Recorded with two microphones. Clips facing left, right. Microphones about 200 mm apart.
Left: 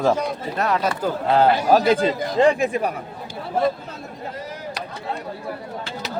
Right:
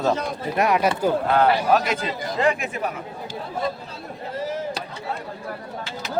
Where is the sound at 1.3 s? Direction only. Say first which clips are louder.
Left 5 dB; 35° left (ahead or behind).